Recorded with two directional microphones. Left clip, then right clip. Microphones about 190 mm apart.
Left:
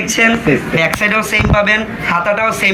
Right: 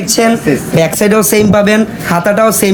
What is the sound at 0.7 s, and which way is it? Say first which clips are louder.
Speech: right 6 dB; 65° right (ahead or behind).